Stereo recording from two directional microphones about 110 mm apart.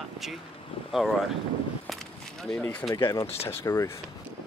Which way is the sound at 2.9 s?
45° left (ahead or behind).